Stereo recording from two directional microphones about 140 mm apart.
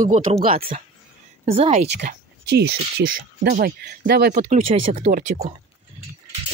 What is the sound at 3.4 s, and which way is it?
Speech, 90° right.